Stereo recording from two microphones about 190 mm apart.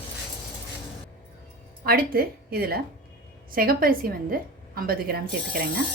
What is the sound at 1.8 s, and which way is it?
A woman's voice, 50° right (ahead or behind).